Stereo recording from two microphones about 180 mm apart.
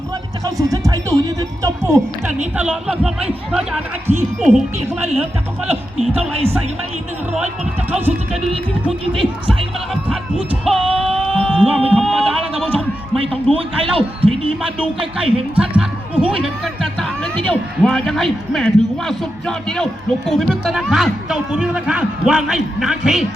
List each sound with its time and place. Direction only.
0.4 s speech: 20° right (ahead or behind)
2.6 s speech: 5° right (ahead or behind)
5.6 s speech: 35° right (ahead or behind)
9.1 s speech: 30° right (ahead or behind)
9.9 s speech: 5° right (ahead or behind)
10.7 s a sound: 30° right (ahead or behind)
11.5 s speech: 30° right (ahead or behind)
11.9 s a sound: 5° left (ahead or behind)
12.5 s a man's voice: 5° left (ahead or behind)
13.2 s speech: 30° right (ahead or behind)
15.5 s speech: 5° right (ahead or behind)